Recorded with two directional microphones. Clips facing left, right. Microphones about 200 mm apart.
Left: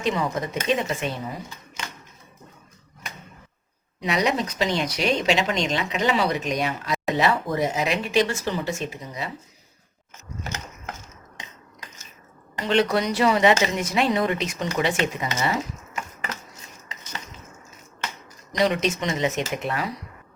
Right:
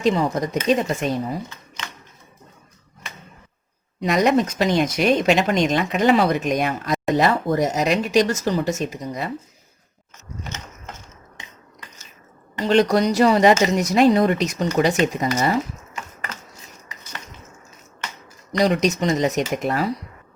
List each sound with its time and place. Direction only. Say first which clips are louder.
0.0 s speech: right 5 dB; 40° right (ahead or behind)
4.0 s speech: right 6 dB; 45° right (ahead or behind)
12.6 s speech: right 5 dB; 40° right (ahead or behind)
16.9 s a sound: left 2 dB; 20° left (ahead or behind)
18.6 s speech: right 4 dB; 40° right (ahead or behind)